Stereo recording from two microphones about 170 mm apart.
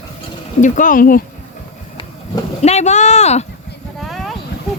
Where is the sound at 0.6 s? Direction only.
50° left (ahead or behind).